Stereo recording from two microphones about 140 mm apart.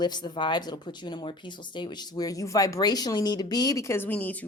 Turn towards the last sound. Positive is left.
turn(degrees=10)  # may be behind; listen again after turning